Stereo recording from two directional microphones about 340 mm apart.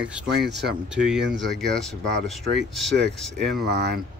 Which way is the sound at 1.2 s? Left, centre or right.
Right.